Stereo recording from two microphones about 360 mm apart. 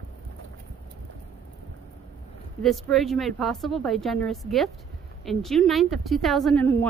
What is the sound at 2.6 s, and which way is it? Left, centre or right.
Speech, centre.